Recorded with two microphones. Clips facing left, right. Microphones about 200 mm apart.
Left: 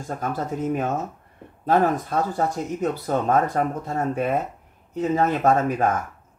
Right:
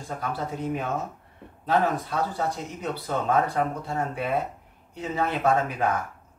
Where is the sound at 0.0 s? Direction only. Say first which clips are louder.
Left 3 dB; 45° left (ahead or behind).